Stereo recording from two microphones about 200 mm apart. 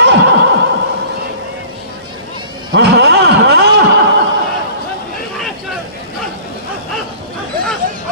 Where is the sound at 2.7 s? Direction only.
55° right (ahead or behind).